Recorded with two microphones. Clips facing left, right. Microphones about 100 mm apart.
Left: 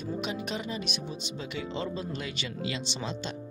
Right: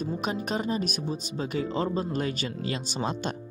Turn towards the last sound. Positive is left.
turn(degrees=-45)  # may be behind; listen again after turning